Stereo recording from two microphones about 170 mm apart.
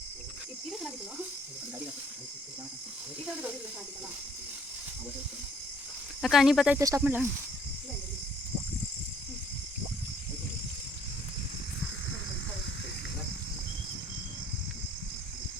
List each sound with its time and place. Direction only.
6.2 s speech: centre (ahead or behind)
6.7 s speech: 20° right (ahead or behind)